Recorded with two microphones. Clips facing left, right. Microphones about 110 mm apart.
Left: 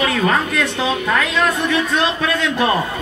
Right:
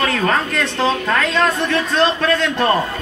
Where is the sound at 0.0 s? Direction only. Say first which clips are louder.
Even; 5° left (ahead or behind).